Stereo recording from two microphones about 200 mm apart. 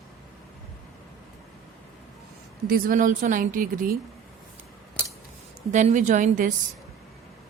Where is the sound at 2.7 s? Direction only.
40° right (ahead or behind).